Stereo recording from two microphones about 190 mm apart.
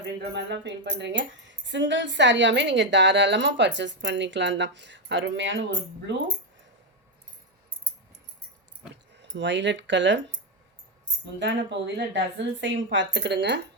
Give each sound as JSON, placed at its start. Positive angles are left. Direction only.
{"t": 0.0, "sound": "speech", "side_deg": -65}
{"t": 9.3, "sound": "speech", "side_deg": -70}
{"t": 11.3, "sound": "speech", "side_deg": -70}